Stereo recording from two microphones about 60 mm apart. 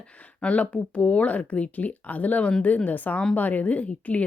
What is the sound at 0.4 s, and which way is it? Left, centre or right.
A woman's voice, left.